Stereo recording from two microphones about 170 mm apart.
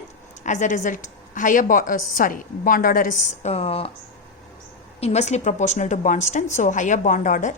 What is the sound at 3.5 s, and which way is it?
Speech, 35° left (ahead or behind).